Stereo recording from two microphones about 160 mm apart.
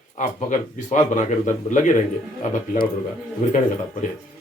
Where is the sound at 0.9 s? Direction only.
50° left (ahead or behind).